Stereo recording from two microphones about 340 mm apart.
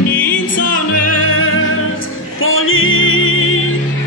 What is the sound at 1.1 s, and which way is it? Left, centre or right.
Music, left.